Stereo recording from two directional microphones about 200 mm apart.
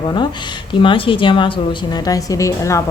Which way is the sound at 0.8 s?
25° left (ahead or behind).